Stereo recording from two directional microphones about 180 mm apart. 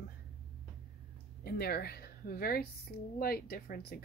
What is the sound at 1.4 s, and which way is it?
A woman's voice, 60° left (ahead or behind).